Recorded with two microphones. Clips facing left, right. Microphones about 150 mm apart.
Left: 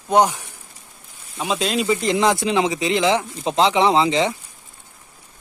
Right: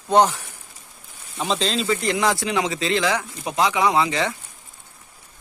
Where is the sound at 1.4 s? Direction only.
10° left (ahead or behind).